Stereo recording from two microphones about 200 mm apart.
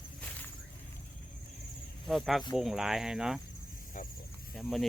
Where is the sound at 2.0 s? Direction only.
Centre (ahead or behind).